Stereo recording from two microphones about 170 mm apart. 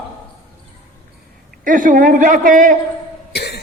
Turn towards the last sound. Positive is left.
turn(degrees=75)  # may be behind; listen again after turning